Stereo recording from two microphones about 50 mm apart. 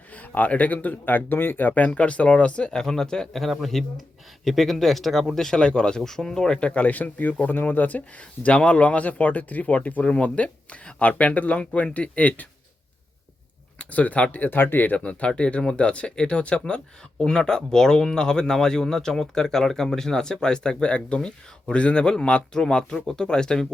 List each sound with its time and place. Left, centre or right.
0.1 s speech: left; by 5.5 s centre
5.5 s speech: centre
13.7 s speech: left
15.0 s speech: left